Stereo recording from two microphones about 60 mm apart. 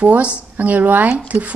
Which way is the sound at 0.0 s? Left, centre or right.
Right.